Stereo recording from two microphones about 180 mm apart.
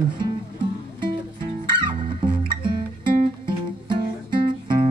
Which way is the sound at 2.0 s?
30° right (ahead or behind).